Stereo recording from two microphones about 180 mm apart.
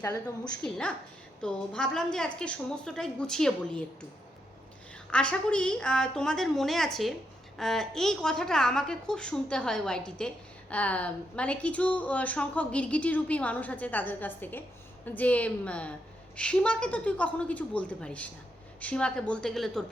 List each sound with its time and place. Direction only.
0.0 s a woman's voice: 15° left (ahead or behind)
0.6 s a woman's voice: 5° left (ahead or behind)
5.1 s a woman's voice: 5° left (ahead or behind)